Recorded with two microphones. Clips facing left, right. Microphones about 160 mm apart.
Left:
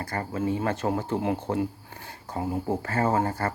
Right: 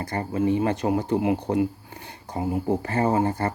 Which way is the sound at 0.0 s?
20° right (ahead or behind).